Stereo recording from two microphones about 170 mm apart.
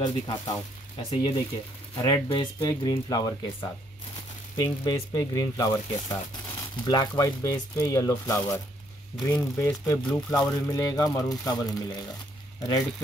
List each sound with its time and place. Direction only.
0.0 s speech: 25° left (ahead or behind)
2.0 s speech: 20° left (ahead or behind)
10.0 s speech: 5° left (ahead or behind)
10.7 s speech: 20° left (ahead or behind)